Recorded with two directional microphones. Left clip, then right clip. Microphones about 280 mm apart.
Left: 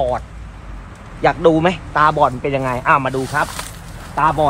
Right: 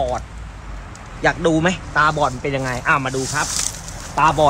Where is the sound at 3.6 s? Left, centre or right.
Centre.